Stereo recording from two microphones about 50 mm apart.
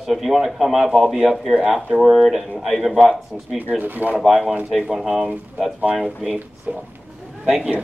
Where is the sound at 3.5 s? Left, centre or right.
Right.